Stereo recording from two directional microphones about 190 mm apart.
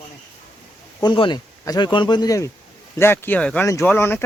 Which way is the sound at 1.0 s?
25° left (ahead or behind).